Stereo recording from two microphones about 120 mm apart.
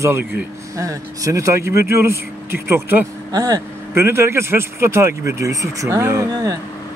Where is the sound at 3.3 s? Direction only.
30° right (ahead or behind).